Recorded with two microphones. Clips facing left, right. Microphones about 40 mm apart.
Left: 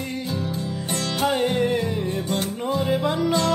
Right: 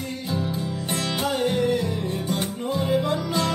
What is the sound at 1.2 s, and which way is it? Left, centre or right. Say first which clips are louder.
Music: left 2 dB; left.